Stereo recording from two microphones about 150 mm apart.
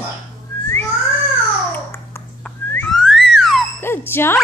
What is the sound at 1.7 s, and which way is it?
Babbling, 15° left (ahead or behind).